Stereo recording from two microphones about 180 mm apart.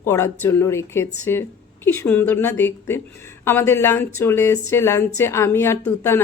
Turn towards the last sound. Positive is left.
turn(degrees=15)  # may be behind; listen again after turning